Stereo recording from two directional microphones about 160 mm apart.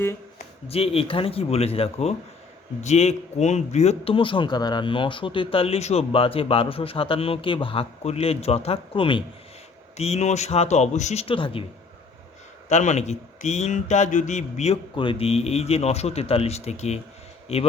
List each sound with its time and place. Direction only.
0.7 s a man's voice: 40° left (ahead or behind)
10.0 s speech: 45° left (ahead or behind)
12.6 s a man's voice: 45° left (ahead or behind)